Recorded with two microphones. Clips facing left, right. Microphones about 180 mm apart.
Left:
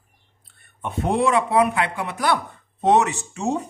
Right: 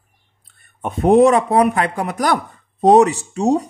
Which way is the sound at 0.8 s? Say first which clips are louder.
Right 9 dB; 45° right (ahead or behind).